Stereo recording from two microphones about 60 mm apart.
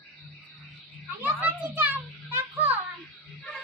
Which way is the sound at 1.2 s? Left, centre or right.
Right.